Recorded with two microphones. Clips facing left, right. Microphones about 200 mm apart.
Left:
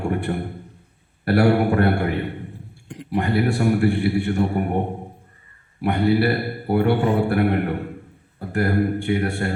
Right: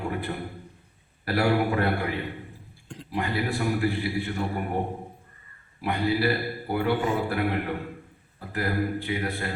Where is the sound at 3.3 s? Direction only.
70° left (ahead or behind).